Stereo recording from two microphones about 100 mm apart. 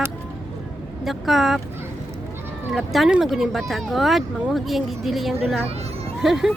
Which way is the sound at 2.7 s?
Centre (ahead or behind).